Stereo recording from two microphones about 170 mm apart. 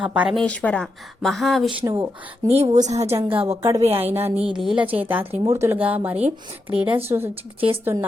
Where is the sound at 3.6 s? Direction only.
15° right (ahead or behind).